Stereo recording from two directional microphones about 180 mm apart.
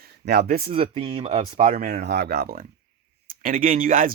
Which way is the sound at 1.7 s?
55° right (ahead or behind).